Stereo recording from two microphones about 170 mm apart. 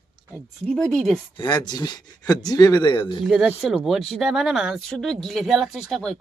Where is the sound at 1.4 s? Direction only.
25° left (ahead or behind).